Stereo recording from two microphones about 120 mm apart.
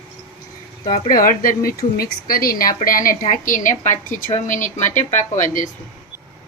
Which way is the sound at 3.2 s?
90° left.